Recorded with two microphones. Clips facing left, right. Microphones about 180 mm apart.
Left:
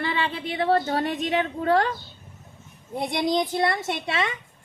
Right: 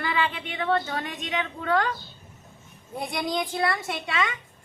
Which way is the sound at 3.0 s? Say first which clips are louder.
Left 5 dB; 30° left (ahead or behind).